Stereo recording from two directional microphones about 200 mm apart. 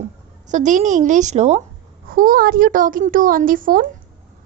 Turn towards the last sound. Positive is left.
turn(degrees=-45)  # may be behind; listen again after turning